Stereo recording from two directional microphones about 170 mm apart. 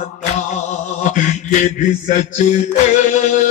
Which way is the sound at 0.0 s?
45° left (ahead or behind).